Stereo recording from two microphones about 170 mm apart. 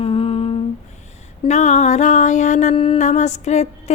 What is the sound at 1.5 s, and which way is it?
Mantra, 40° left (ahead or behind).